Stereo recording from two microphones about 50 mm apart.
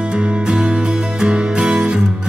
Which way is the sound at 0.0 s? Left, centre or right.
Centre.